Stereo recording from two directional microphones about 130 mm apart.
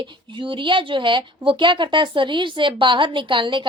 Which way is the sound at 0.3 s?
40° right (ahead or behind).